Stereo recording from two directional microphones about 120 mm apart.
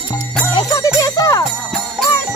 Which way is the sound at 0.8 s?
25° left (ahead or behind).